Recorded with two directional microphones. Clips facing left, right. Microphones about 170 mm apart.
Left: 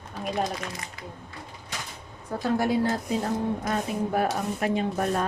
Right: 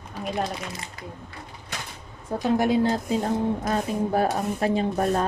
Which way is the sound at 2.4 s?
20° right (ahead or behind).